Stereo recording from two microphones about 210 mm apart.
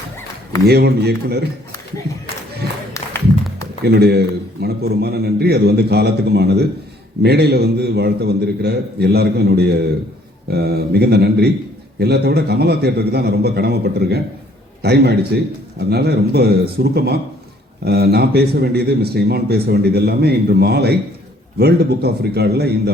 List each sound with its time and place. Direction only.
0.7 s speech: 50° right (ahead or behind)
3.8 s a man's voice: 50° right (ahead or behind)